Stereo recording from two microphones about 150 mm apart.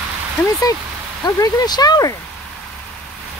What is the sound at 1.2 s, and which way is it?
Speech, 25° left (ahead or behind).